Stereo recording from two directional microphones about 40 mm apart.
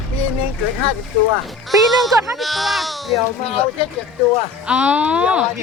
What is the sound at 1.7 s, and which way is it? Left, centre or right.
Speech, centre.